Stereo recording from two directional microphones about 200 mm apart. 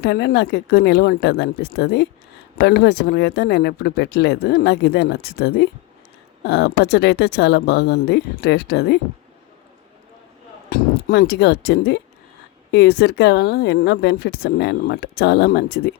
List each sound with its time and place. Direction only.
0.0 s speech: 55° left (ahead or behind)
10.7 s speech: 55° left (ahead or behind)